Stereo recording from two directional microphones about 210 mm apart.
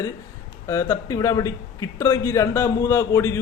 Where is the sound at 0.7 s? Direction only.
15° left (ahead or behind).